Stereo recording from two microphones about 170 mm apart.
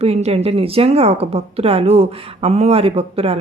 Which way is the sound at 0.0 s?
35° right (ahead or behind).